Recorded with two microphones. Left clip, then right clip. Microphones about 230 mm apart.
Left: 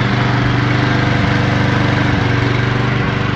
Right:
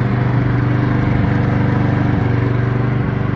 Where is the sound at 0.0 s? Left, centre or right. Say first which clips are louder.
Left 4 dB; centre.